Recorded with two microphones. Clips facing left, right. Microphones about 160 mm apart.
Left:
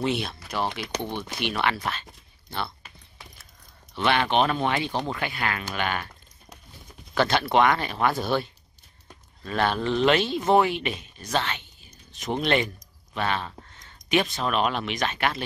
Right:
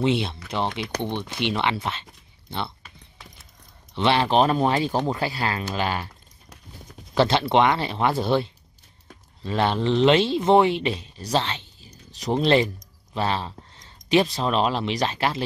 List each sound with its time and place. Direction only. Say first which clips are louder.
0.0 s speech: right 4 dB; 25° right (ahead or behind)
3.9 s speech: right 3 dB; 30° right (ahead or behind)
7.2 s speech: right 2 dB; 25° right (ahead or behind)